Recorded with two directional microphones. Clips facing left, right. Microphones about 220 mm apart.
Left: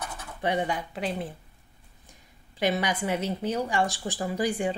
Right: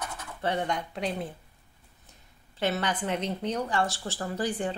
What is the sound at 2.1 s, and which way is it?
Speech, 15° left (ahead or behind).